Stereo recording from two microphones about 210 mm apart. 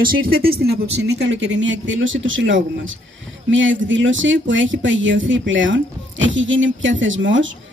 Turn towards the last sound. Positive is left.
turn(degrees=-65)  # may be behind; listen again after turning